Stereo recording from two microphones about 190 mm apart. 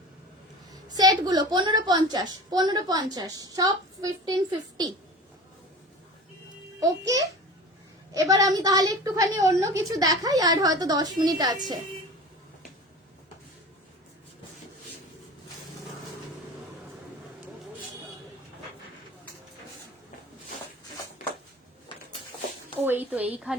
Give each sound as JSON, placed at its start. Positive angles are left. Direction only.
{"t": 0.7, "sound": "a woman's voice", "side_deg": -20}
{"t": 6.7, "sound": "a child's voice", "side_deg": -15}
{"t": 22.8, "sound": "a sound", "side_deg": -10}